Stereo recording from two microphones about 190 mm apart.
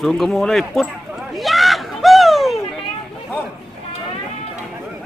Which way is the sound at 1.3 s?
Centre (ahead or behind).